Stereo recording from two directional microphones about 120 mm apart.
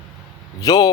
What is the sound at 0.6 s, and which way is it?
Speech, 30° left (ahead or behind).